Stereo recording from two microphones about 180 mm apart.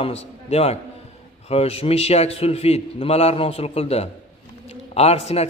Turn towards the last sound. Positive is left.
turn(degrees=35)  # may be behind; listen again after turning